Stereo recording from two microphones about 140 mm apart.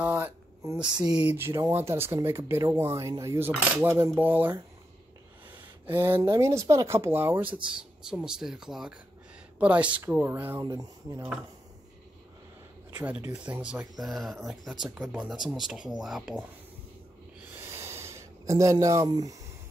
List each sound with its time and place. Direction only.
0.0 s speech: 15° right (ahead or behind)
5.9 s speech: 15° right (ahead or behind)
12.9 s speech: 15° right (ahead or behind)
17.6 s a sound: 20° right (ahead or behind)